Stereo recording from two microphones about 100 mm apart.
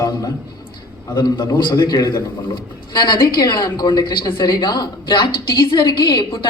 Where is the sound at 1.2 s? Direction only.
50° left (ahead or behind).